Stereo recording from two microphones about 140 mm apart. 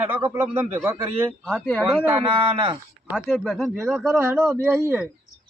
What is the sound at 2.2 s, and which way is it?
Speech, 35° right (ahead or behind).